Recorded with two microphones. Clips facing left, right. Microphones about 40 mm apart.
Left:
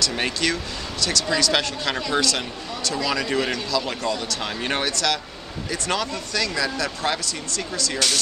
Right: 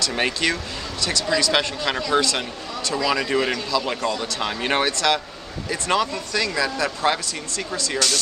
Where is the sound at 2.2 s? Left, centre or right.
Centre.